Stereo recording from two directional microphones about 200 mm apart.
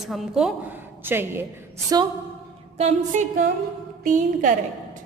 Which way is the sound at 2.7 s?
35° right (ahead or behind).